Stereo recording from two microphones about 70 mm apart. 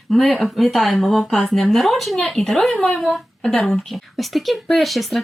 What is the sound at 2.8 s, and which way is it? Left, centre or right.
A woman's voice, centre.